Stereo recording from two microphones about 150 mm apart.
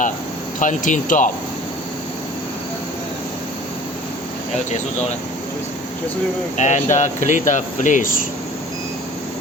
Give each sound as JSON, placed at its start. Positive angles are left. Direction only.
{"t": 0.6, "sound": "speech", "side_deg": 55}
{"t": 6.6, "sound": "speech", "side_deg": 55}